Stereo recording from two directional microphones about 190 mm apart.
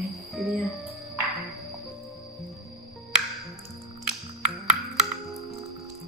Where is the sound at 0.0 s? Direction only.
Centre (ahead or behind).